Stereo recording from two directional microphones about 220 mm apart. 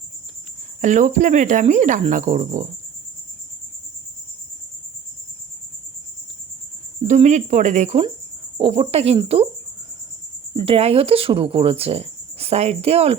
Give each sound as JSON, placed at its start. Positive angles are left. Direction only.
{"t": 0.8, "sound": "speech", "side_deg": -35}
{"t": 7.0, "sound": "speech", "side_deg": -30}
{"t": 10.5, "sound": "speech", "side_deg": -25}